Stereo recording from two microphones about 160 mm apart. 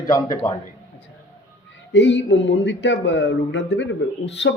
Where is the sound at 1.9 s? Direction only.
90° left.